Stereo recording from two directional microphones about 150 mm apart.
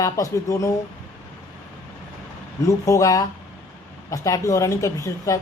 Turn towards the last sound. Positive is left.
turn(degrees=20)  # may be behind; listen again after turning